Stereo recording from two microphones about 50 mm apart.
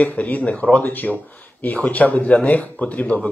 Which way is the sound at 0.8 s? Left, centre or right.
Left.